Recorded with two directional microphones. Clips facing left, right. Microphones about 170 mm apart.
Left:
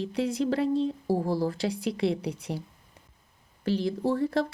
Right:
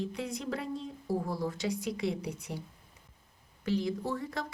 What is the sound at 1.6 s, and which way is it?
Speech, 65° left (ahead or behind).